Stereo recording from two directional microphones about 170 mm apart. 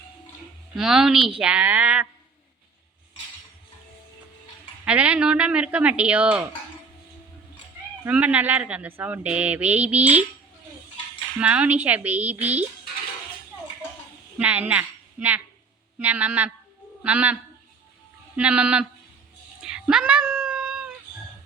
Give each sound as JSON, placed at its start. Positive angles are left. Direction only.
{"t": 0.8, "sound": "a woman's voice", "side_deg": 0}
{"t": 4.9, "sound": "a woman's voice", "side_deg": -5}
{"t": 8.0, "sound": "a woman's voice", "side_deg": -10}
{"t": 11.3, "sound": "a woman's voice", "side_deg": -10}
{"t": 14.3, "sound": "a woman's voice", "side_deg": -10}
{"t": 18.3, "sound": "a woman's voice", "side_deg": -5}
{"t": 19.6, "sound": "cat", "side_deg": -5}